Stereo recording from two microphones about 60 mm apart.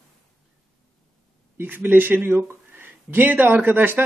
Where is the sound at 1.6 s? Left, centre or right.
Right.